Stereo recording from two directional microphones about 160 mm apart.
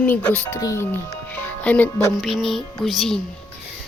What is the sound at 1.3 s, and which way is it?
Music, 10° left (ahead or behind).